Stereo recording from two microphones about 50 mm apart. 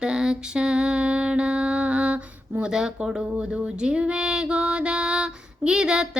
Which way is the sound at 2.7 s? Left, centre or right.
Centre.